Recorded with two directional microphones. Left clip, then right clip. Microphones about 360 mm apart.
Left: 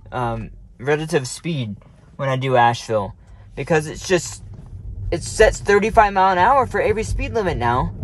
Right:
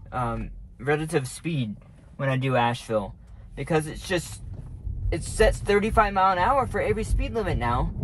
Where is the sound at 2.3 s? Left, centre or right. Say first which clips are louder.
Left 8 dB; left.